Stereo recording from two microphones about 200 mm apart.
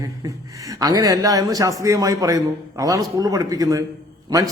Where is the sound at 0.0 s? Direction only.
15° right (ahead or behind).